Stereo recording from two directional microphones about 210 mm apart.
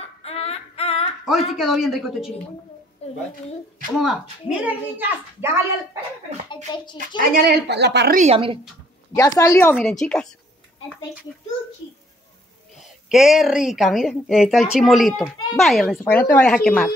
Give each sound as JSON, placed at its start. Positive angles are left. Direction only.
{"t": 0.0, "sound": "a sound", "side_deg": 30}
{"t": 1.6, "sound": "a woman's voice", "side_deg": 0}
{"t": 3.0, "sound": "a sound", "side_deg": 30}
{"t": 4.0, "sound": "a woman's voice", "side_deg": 0}
{"t": 6.5, "sound": "speech", "side_deg": 20}
{"t": 7.3, "sound": "a woman's voice", "side_deg": -50}
{"t": 8.2, "sound": "speech", "side_deg": -25}
{"t": 9.1, "sound": "a woman's voice", "side_deg": 15}
{"t": 12.7, "sound": "a woman's voice", "side_deg": 0}